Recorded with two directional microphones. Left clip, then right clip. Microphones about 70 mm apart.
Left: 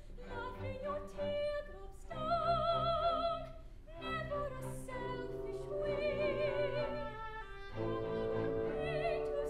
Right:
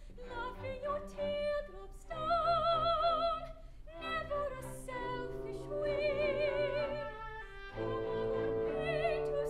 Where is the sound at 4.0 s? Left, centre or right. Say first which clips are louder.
Right 3 dB; right.